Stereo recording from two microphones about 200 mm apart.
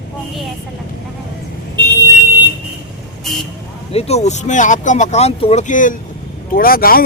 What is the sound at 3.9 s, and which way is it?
Speech, 30° left (ahead or behind).